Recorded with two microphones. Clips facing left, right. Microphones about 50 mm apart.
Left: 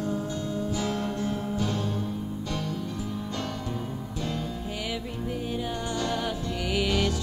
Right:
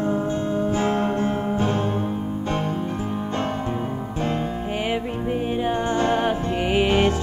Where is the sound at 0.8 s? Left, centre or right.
Right.